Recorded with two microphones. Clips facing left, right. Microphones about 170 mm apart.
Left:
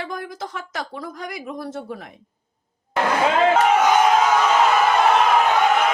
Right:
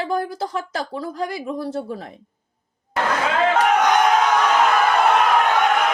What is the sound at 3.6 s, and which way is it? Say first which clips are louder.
Crowd: left 1 dB; 5° left (ahead or behind).